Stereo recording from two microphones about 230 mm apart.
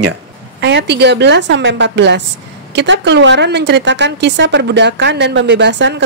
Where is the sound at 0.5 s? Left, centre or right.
Right.